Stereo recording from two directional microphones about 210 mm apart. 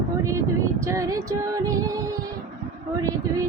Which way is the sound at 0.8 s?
15° right (ahead or behind).